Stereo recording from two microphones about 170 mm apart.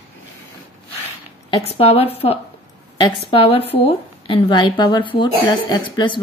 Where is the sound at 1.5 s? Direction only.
35° left (ahead or behind).